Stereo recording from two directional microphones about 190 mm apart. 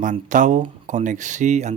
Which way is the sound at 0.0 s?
40° right (ahead or behind).